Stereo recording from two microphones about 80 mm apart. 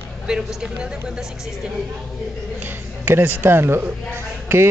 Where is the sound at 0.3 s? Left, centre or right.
Centre.